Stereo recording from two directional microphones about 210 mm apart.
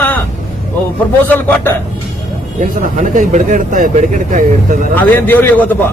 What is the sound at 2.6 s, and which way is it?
Speech, 40° right (ahead or behind).